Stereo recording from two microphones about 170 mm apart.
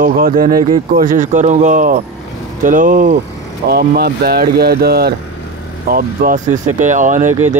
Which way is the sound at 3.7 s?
65° right (ahead or behind).